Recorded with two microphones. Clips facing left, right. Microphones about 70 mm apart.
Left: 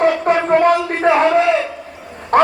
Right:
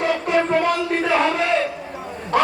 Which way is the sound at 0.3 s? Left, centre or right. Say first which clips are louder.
Left 4 dB; left.